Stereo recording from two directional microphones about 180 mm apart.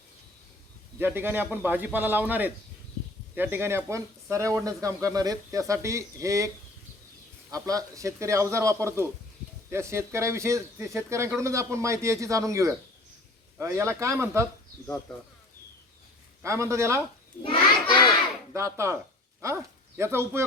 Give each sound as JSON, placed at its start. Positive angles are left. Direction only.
{"t": 0.9, "sound": "speech", "side_deg": -10}
{"t": 7.5, "sound": "speech", "side_deg": -20}
{"t": 16.4, "sound": "speech", "side_deg": -15}
{"t": 17.4, "sound": "child singing", "side_deg": 25}
{"t": 18.5, "sound": "speech", "side_deg": -15}